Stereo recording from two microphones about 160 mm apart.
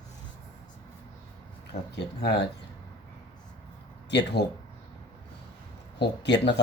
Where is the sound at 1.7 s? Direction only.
45° left (ahead or behind).